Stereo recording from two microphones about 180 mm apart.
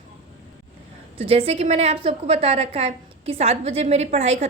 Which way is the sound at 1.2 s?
30° right (ahead or behind).